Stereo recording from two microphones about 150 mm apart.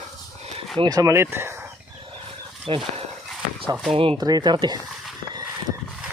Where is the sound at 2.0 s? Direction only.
40° right (ahead or behind).